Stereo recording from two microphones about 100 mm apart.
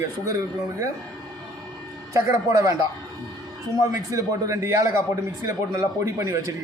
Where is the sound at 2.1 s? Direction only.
35° right (ahead or behind).